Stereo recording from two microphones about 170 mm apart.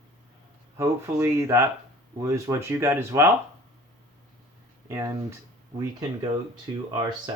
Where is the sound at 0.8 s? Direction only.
15° right (ahead or behind).